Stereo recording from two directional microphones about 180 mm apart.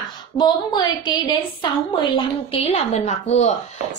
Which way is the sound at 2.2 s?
35° left (ahead or behind).